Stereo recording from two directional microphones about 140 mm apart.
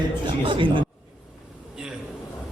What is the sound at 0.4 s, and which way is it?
Speech, 35° right (ahead or behind).